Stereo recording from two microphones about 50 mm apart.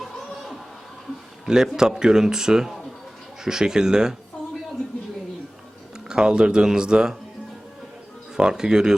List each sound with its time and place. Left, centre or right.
0.0 s a sound: centre
1.5 s speech: centre
6.1 s speech: centre
8.4 s speech: centre